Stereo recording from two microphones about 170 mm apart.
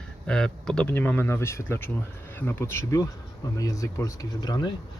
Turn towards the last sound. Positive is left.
turn(degrees=25)  # may be behind; listen again after turning